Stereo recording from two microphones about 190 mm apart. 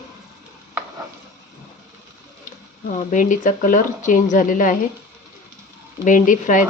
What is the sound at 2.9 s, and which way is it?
Speech, 40° left (ahead or behind).